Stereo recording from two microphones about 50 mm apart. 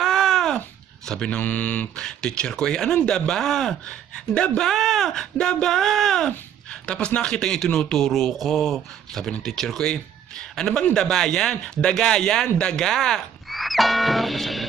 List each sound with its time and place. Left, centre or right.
0.0 s a sound: centre
1.0 s speech: centre
1.3 s speech: left
2.0 s speech: centre
4.7 s speech: centre
6.7 s speech: left
8.1 s music: centre
9.4 s a man's voice: centre
13.6 s music: centre